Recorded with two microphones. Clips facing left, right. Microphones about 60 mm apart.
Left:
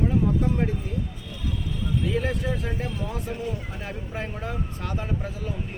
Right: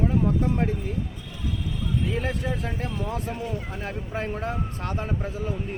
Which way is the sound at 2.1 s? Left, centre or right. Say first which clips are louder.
Left 2 dB; right.